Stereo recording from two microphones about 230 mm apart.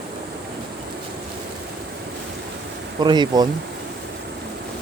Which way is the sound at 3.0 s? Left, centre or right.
Centre.